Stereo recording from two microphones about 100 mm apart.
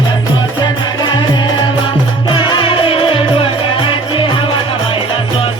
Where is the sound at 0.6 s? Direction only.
50° left (ahead or behind).